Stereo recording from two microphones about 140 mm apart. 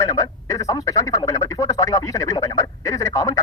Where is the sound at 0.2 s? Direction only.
25° left (ahead or behind).